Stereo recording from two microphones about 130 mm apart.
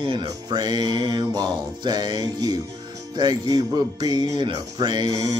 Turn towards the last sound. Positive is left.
turn(degrees=-30)  # may be behind; listen again after turning